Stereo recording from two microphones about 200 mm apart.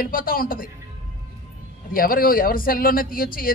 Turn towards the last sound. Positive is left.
turn(degrees=45)  # may be behind; listen again after turning